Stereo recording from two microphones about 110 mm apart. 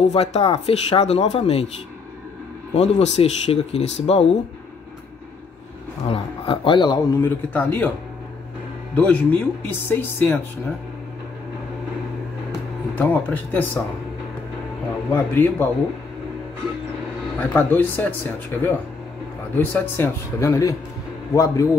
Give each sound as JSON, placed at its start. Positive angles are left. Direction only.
{"t": 0.0, "sound": "speech", "side_deg": 75}
{"t": 2.7, "sound": "speech", "side_deg": 90}
{"t": 6.0, "sound": "speech", "side_deg": 60}
{"t": 7.2, "sound": "speech", "side_deg": 20}
{"t": 8.9, "sound": "speech", "side_deg": 15}
{"t": 12.9, "sound": "speech", "side_deg": 15}
{"t": 15.1, "sound": "speech", "side_deg": 20}
{"t": 17.4, "sound": "a man's voice", "side_deg": 20}